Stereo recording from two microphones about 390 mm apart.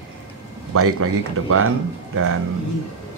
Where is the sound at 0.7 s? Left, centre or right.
Right.